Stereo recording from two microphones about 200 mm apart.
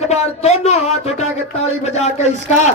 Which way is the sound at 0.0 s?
35° left (ahead or behind).